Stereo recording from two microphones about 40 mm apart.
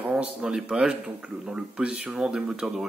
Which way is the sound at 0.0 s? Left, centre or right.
Right.